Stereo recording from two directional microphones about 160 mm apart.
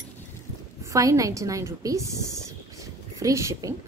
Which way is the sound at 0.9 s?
20° right (ahead or behind).